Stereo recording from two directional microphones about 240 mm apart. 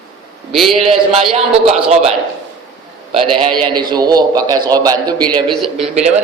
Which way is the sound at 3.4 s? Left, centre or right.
Right.